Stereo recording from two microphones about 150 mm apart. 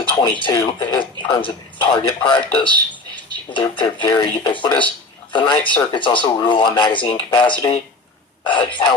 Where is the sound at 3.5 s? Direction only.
30° left (ahead or behind).